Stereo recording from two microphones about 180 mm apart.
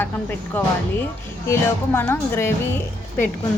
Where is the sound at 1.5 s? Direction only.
15° left (ahead or behind).